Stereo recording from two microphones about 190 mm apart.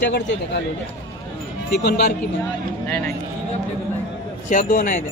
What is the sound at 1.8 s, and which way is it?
Speech, 60° left (ahead or behind).